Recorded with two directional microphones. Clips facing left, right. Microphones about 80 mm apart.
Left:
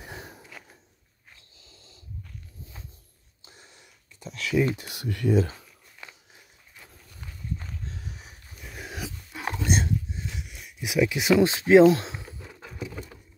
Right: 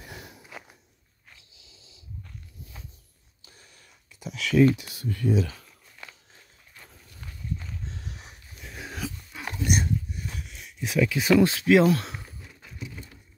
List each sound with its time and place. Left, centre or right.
0.0 s walk: left
0.4 s walk: centre
1.6 s a sound: left
2.6 s walk: left
3.4 s a sound: left
4.2 s speech: centre
4.8 s speech: left
5.6 s walk: centre
7.8 s dog: centre
9.4 s dog: left
10.3 s a sound: centre; by 12.3 s left